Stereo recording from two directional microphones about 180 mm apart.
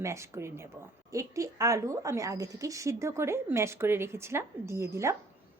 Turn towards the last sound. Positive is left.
turn(degrees=-15)  # may be behind; listen again after turning